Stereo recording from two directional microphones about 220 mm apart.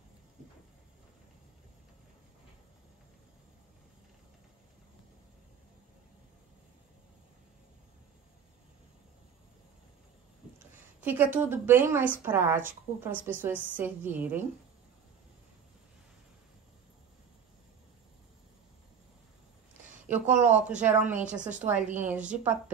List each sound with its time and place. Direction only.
11.0 s a woman's voice: 10° right (ahead or behind)
20.1 s a woman's voice: 5° right (ahead or behind)
21.4 s a woman's voice: 35° right (ahead or behind)
21.6 s a woman's voice: 5° right (ahead or behind)